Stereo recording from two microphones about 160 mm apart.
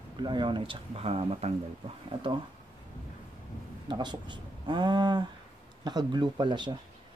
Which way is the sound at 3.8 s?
30° right (ahead or behind).